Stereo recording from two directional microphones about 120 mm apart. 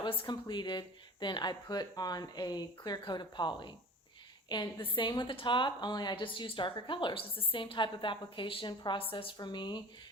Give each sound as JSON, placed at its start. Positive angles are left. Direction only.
{"t": 0.0, "sound": "a woman's voice", "side_deg": 45}